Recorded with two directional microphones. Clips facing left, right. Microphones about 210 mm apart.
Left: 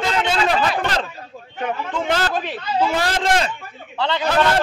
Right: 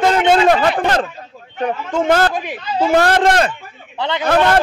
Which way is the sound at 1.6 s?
45° right (ahead or behind).